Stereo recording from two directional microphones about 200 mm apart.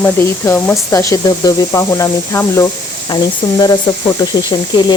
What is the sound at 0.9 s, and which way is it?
Speech, 15° left (ahead or behind).